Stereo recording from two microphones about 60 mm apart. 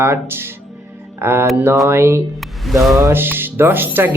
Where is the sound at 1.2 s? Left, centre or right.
Right.